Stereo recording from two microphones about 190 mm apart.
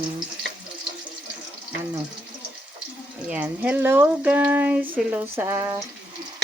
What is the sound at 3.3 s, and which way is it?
Speech, 10° right (ahead or behind).